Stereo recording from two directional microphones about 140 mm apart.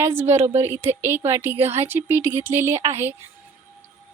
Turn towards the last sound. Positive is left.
turn(degrees=-20)  # may be behind; listen again after turning